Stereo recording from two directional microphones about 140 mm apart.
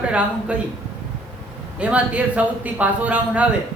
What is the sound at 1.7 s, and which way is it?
Speech, 10° right (ahead or behind).